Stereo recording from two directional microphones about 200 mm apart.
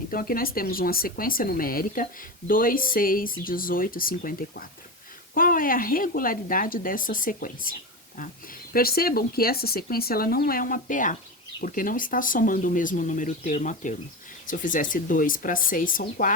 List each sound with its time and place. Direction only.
0.1 s speech: 45° left (ahead or behind)